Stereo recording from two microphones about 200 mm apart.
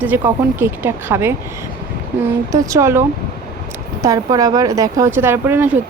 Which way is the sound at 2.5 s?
15° right (ahead or behind).